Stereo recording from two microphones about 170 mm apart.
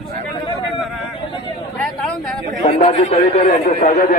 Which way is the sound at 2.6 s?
35° left (ahead or behind).